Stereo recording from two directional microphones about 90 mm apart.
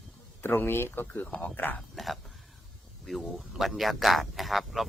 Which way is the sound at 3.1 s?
Centre (ahead or behind).